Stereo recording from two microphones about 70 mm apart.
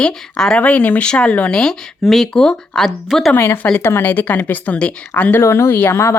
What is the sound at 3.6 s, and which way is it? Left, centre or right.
Speech, left.